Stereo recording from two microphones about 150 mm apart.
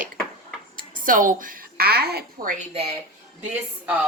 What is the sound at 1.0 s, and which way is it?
Speech, 65° right (ahead or behind).